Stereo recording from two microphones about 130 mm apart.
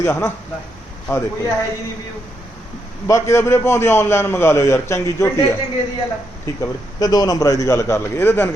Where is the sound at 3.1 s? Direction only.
25° left (ahead or behind).